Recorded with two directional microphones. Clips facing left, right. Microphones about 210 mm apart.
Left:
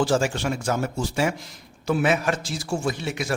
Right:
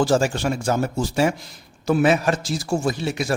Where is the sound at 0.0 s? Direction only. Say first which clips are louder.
Right 3 dB; 40° right (ahead or behind).